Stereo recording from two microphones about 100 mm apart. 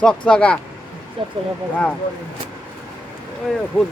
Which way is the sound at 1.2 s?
65° right (ahead or behind).